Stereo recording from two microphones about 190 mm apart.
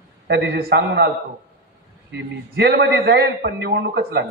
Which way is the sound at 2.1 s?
60° right (ahead or behind).